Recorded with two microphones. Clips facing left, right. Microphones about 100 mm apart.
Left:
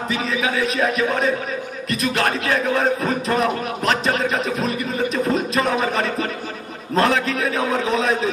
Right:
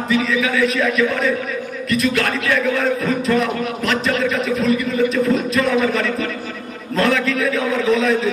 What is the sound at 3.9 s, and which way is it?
A man's voice, 30° left (ahead or behind).